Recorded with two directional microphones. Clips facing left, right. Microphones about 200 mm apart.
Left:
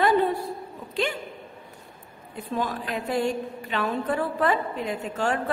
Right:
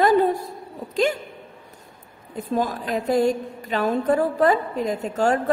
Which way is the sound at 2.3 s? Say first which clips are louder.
Right 5 dB; 40° right (ahead or behind).